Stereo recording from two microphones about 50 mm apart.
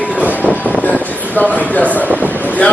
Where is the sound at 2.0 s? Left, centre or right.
Right.